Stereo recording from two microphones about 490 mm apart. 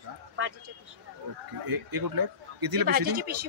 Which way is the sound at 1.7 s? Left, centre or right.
Right.